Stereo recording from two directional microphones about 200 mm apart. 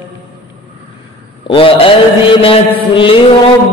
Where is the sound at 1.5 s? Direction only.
25° left (ahead or behind).